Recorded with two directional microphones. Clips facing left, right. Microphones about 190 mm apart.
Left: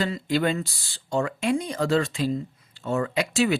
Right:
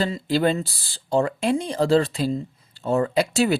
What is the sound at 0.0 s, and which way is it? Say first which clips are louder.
Speech: right 3 dB; 30° right (ahead or behind).